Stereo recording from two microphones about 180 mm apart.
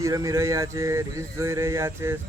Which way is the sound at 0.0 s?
20° right (ahead or behind).